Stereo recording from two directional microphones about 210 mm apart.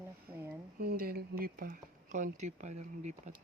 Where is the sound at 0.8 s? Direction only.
45° right (ahead or behind).